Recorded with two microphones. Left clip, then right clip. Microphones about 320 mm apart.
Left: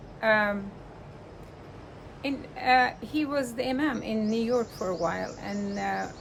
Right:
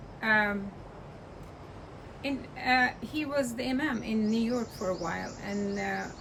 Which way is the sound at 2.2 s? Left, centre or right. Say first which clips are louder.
Left 4 dB; centre.